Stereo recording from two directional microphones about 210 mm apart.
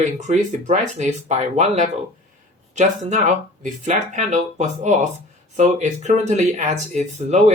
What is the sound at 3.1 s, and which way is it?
Speech, 35° right (ahead or behind).